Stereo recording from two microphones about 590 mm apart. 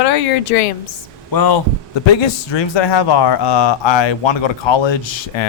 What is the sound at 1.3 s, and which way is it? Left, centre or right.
Speech, left.